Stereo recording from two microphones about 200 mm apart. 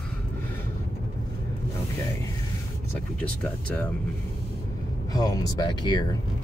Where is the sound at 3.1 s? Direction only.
5° left (ahead or behind).